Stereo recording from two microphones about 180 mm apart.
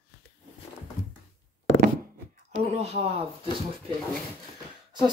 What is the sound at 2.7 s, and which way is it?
Speech, 35° right (ahead or behind).